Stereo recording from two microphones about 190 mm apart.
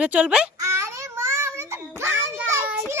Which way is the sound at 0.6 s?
15° right (ahead or behind).